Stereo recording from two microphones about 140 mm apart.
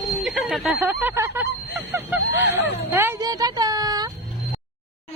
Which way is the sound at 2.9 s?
20° right (ahead or behind).